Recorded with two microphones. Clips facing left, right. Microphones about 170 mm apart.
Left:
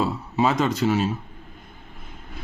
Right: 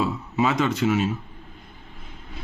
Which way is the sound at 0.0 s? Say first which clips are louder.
Left 1 dB; 35° left (ahead or behind).